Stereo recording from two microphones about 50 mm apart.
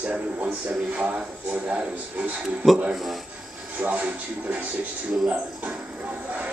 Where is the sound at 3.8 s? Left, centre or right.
Right.